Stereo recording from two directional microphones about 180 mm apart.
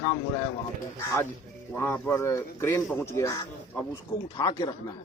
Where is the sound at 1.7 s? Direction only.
15° left (ahead or behind).